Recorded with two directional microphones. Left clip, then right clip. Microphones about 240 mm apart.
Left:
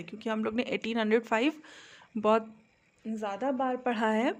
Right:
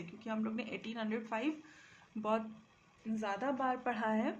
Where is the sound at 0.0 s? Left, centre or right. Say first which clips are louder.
Left 9 dB; left.